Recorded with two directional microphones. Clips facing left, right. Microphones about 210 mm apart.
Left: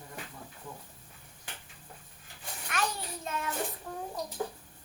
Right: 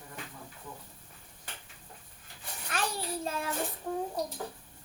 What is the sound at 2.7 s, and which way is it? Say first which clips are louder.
Child singing: right 1 dB; 30° right (ahead or behind).